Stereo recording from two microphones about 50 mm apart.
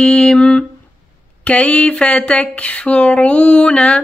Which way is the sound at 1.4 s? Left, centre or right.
Left.